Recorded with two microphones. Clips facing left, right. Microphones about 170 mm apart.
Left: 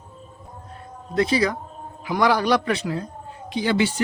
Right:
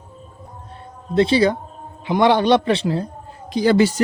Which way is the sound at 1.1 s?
30° right (ahead or behind).